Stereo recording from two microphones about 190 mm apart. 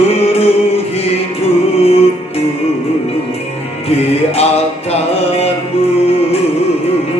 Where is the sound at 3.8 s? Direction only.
30° left (ahead or behind).